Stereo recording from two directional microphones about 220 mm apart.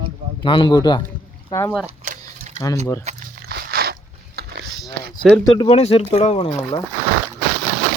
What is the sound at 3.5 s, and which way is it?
Crunch, 45° right (ahead or behind).